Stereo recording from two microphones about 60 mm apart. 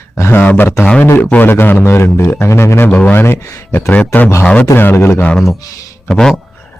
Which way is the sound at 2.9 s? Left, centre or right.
Left.